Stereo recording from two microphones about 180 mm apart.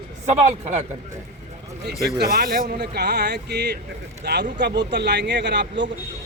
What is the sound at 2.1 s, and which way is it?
Speech, 60° right (ahead or behind).